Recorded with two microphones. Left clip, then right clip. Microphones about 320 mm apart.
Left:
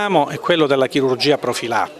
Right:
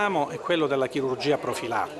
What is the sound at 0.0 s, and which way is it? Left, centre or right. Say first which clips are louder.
Speech: left 8 dB; left.